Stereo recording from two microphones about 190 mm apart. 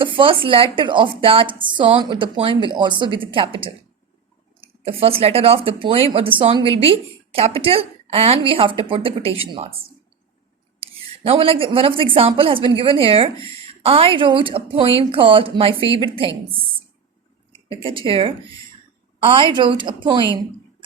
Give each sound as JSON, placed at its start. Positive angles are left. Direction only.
{"t": 0.0, "sound": "a woman's voice", "side_deg": -25}
{"t": 11.3, "sound": "a woman's voice", "side_deg": -30}
{"t": 17.5, "sound": "a woman's voice", "side_deg": -25}